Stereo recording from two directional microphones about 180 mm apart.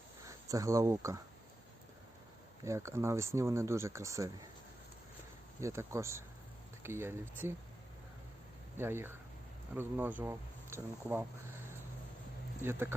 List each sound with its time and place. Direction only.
0.3 s speech: 20° right (ahead or behind)
2.6 s speech: 15° right (ahead or behind)
5.5 s speech: 15° right (ahead or behind)
8.8 s speech: 10° right (ahead or behind)
12.6 s speech: 10° right (ahead or behind)